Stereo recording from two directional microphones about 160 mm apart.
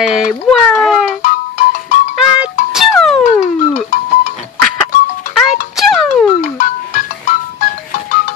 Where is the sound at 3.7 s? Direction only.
50° left (ahead or behind).